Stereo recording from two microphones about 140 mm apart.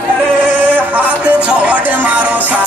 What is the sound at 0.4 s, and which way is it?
Music, 10° right (ahead or behind).